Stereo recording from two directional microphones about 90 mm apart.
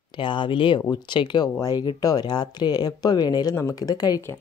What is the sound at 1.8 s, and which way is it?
Speech, 50° left (ahead or behind).